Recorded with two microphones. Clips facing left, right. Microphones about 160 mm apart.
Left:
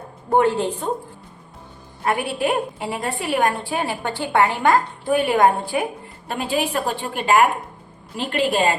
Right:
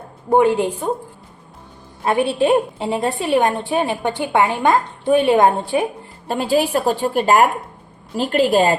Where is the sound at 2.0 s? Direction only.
25° right (ahead or behind).